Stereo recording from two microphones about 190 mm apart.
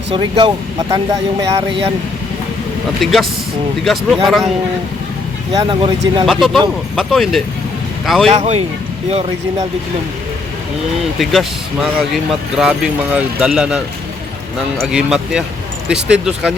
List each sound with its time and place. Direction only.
0.1 s speech: 25° right (ahead or behind)
3.0 s speech: centre (ahead or behind)
5.5 s speech: 25° right (ahead or behind)
6.2 s speech: centre (ahead or behind)
8.3 s speech: 35° right (ahead or behind)
11.2 s speech: centre (ahead or behind)